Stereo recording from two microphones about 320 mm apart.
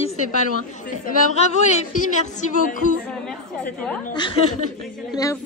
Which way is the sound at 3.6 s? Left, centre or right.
Centre.